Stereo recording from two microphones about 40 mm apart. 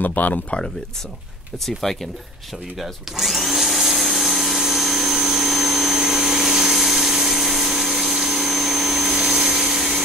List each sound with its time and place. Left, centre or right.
0.0 s speech: left
1.7 s speech: centre
2.8 s vacuum cleaner: centre